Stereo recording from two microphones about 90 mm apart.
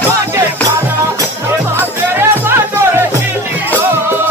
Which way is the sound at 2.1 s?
25° right (ahead or behind).